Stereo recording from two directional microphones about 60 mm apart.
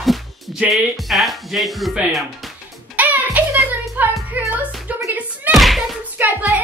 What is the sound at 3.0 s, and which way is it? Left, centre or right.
Music, right.